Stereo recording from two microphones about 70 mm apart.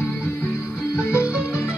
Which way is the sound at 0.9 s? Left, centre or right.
Left.